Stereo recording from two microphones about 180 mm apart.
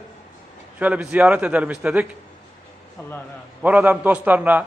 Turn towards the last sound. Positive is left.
turn(degrees=-10)  # may be behind; listen again after turning